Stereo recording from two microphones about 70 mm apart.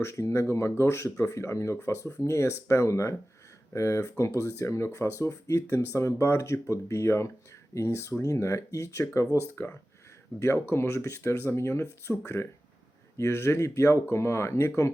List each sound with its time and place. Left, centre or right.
0.0 s speech: left